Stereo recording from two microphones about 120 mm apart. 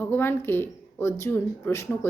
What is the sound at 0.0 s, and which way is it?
A woman's voice, 15° left (ahead or behind).